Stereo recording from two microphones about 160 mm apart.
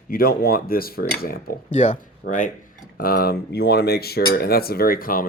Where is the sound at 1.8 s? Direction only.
50° left (ahead or behind).